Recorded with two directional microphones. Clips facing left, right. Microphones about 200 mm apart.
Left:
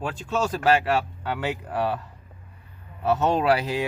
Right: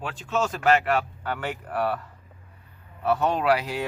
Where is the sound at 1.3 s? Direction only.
15° left (ahead or behind).